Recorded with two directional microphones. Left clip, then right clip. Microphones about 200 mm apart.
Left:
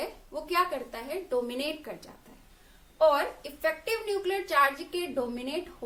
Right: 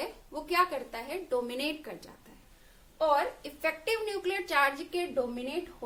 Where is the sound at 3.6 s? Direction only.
20° right (ahead or behind).